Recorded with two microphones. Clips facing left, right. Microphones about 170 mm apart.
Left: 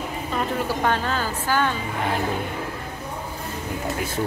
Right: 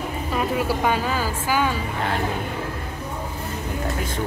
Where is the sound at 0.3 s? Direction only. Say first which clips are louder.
Right 2 dB; 5° right (ahead or behind).